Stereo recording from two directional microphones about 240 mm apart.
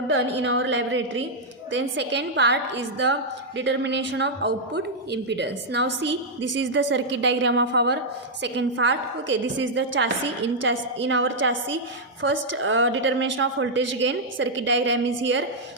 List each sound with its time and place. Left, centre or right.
0.1 s a woman's voice: right